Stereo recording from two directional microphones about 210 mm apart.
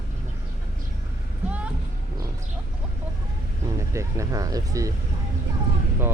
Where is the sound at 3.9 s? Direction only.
15° right (ahead or behind).